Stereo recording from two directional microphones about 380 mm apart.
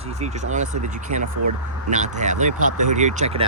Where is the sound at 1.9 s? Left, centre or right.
Centre.